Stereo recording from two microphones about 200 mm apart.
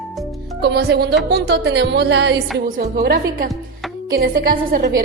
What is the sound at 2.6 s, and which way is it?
A woman's voice, 45° right (ahead or behind).